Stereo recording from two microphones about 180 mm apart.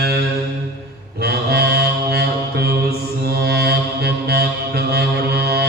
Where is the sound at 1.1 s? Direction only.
60° right (ahead or behind).